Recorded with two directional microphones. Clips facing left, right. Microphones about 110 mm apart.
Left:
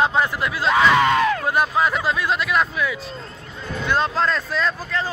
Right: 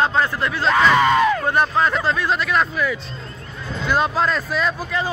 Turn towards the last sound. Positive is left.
turn(degrees=-10)  # may be behind; listen again after turning